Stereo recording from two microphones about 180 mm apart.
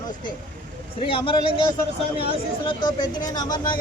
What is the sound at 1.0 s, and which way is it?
A man's voice, 30° left (ahead or behind).